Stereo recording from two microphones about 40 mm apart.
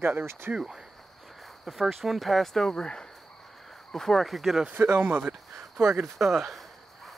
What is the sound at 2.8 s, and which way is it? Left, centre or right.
Speech, centre.